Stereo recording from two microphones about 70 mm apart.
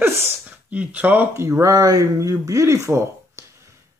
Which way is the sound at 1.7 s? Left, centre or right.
Right.